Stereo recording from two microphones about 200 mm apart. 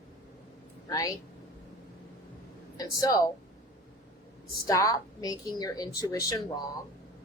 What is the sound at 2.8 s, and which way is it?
Speech, 15° left (ahead or behind).